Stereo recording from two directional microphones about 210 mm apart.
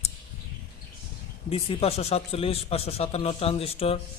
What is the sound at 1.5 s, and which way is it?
Speech, 30° left (ahead or behind).